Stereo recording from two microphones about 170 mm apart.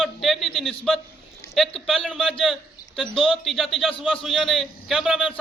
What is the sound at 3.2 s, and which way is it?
A man's voice, centre (ahead or behind).